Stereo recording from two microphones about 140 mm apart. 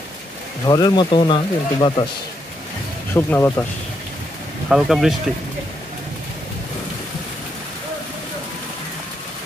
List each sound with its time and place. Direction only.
0.7 s speech: 30° left (ahead or behind)
3.2 s speech: 15° left (ahead or behind)
4.6 s speech: centre (ahead or behind)